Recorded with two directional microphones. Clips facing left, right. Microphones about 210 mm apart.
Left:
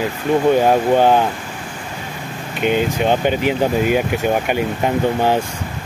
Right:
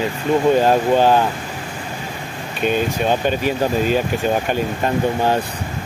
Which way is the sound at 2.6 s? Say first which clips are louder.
Left 2 dB; 15° left (ahead or behind).